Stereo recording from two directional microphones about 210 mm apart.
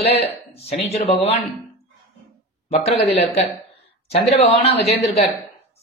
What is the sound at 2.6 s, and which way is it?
Speech, 30° left (ahead or behind).